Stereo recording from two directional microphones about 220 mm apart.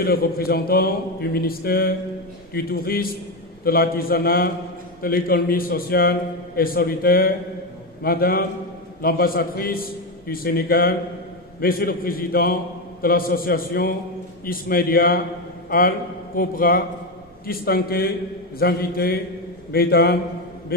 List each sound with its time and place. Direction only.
0.0 s a man's voice: 45° left (ahead or behind)
16.3 s a man's voice: 40° left (ahead or behind)